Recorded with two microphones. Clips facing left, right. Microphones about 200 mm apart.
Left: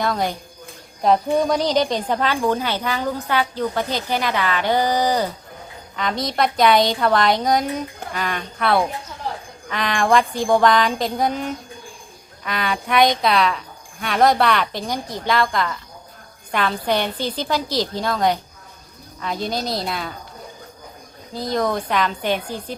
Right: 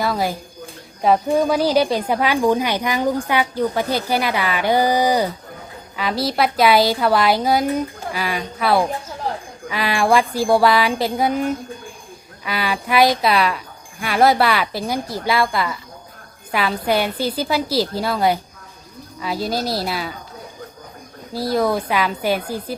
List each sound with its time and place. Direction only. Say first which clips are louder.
0.0 s a woman's voice: right 1 dB; 5° right (ahead or behind)
12.5 s a woman's voice: right 1 dB; 5° right (ahead or behind)
21.3 s a woman's voice: right 3 dB; 5° right (ahead or behind)